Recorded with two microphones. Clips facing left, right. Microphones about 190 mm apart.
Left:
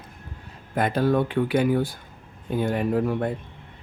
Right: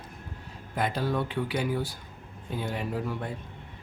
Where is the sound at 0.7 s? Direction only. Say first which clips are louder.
Left 7 dB; 55° left (ahead or behind).